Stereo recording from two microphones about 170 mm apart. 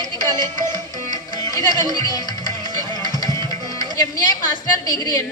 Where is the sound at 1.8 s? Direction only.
25° right (ahead or behind).